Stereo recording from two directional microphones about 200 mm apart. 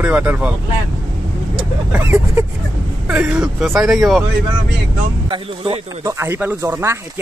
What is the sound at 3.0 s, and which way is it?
Speech, 5° right (ahead or behind).